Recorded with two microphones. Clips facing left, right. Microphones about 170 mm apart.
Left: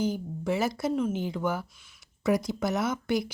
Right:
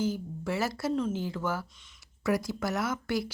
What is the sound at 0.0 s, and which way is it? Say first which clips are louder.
Speech: left 2 dB; 20° left (ahead or behind).